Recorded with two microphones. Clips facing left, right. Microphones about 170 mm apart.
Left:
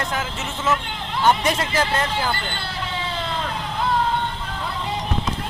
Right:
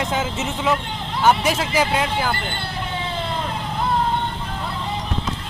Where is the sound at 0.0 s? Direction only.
20° right (ahead or behind).